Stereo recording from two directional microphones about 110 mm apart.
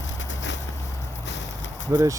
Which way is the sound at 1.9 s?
35° right (ahead or behind).